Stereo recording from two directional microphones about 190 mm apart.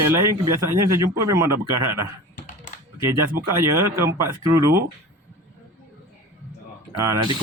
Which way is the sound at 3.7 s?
15° right (ahead or behind).